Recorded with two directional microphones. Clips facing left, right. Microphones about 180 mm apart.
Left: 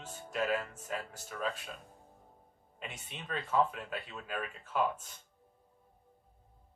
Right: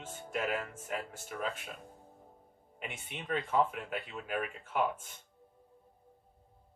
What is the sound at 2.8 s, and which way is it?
Speech, 20° right (ahead or behind).